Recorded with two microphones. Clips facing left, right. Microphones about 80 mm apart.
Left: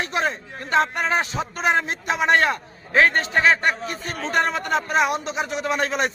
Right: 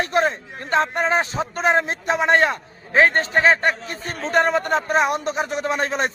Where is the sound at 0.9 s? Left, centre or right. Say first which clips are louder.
Right 2 dB; right.